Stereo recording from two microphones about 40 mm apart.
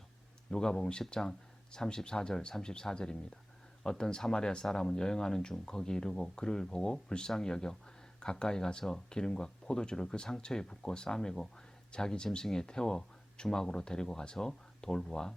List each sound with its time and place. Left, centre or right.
0.5 s speech: centre